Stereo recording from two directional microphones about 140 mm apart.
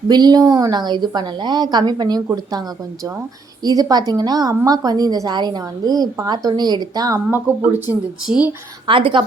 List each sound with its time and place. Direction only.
0.1 s a woman's voice: 30° right (ahead or behind)
7.3 s speech: 15° right (ahead or behind)
8.9 s a woman's voice: 35° right (ahead or behind)